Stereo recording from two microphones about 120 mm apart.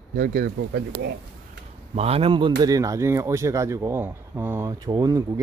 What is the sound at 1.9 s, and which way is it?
Speech, 55° right (ahead or behind).